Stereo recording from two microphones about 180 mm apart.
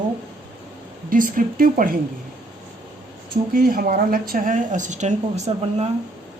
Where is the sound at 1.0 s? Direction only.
50° right (ahead or behind).